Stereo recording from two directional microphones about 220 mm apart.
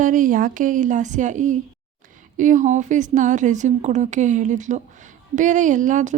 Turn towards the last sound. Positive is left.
turn(degrees=-35)  # may be behind; listen again after turning